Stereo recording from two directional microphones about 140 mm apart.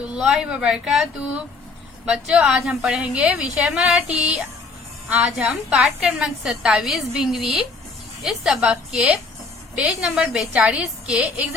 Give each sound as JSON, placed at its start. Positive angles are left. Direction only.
{"t": 0.0, "sound": "a woman's voice", "side_deg": -5}
{"t": 2.0, "sound": "a woman's voice", "side_deg": -5}